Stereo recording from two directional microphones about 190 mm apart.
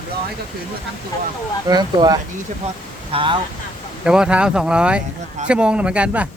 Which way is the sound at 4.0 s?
5° right (ahead or behind).